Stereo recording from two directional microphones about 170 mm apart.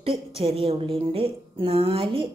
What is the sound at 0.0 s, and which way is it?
A woman's voice, 35° right (ahead or behind).